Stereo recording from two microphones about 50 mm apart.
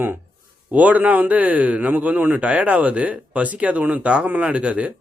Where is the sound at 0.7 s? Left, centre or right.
Right.